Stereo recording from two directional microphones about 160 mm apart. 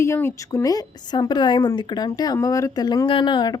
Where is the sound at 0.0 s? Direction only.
15° left (ahead or behind).